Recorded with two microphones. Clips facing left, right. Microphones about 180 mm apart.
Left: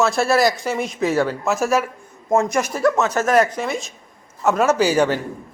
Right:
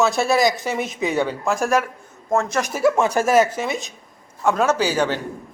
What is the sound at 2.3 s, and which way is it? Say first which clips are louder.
Speech: left 3 dB; 20° left (ahead or behind).